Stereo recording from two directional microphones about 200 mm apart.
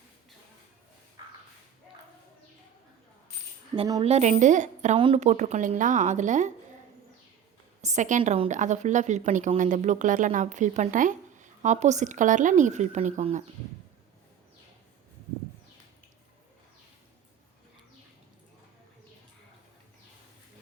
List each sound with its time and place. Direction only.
3.8 s speech: 20° right (ahead or behind)
4.0 s a woman's voice: 35° right (ahead or behind)
7.8 s a woman's voice: 35° right (ahead or behind)